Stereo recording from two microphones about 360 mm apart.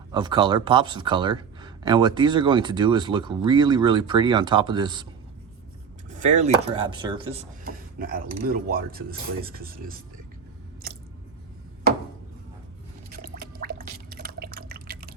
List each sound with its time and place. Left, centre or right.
0.1 s speech: centre
6.1 s speech: centre
13.1 s drip: right